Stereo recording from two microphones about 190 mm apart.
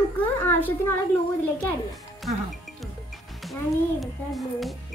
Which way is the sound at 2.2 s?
Centre (ahead or behind).